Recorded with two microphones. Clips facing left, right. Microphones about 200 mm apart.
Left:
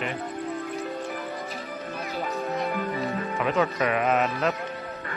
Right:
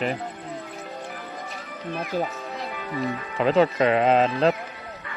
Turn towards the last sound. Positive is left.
turn(degrees=-30)  # may be behind; listen again after turning